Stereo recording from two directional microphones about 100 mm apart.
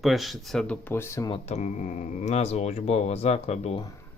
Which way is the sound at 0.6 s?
10° left (ahead or behind).